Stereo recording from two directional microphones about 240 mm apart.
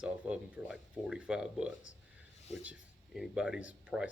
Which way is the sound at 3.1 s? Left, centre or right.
Centre.